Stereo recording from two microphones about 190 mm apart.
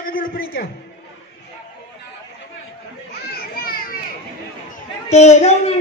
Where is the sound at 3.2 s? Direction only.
55° left (ahead or behind).